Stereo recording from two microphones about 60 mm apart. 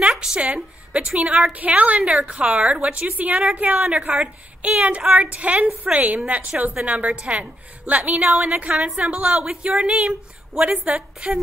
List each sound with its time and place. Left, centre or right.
0.1 s a woman's voice: centre
3.7 s a woman's voice: centre
4.0 s a woman's voice: right
10.7 s a woman's voice: right